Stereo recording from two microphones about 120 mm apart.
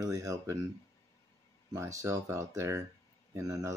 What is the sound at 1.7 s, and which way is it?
Speech, 25° right (ahead or behind).